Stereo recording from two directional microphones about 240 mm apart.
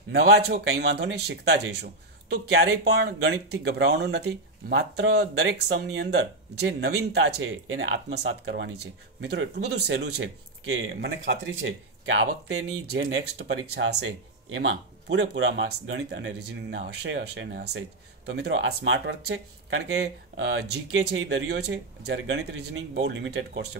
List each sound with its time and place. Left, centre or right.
0.2 s speech: right
7.2 s speech: right
21.3 s speech: right
22.4 s speech: right